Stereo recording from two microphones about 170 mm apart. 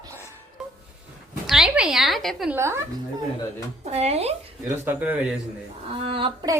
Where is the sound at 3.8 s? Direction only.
40° right (ahead or behind).